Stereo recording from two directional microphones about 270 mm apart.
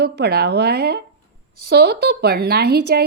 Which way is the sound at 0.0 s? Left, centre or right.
Right.